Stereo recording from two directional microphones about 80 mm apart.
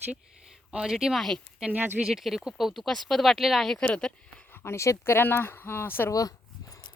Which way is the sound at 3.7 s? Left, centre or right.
Centre.